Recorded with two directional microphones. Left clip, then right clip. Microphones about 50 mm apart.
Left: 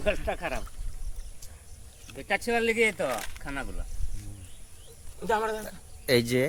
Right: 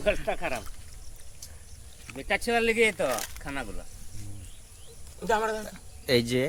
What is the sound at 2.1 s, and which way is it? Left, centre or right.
Speech, centre.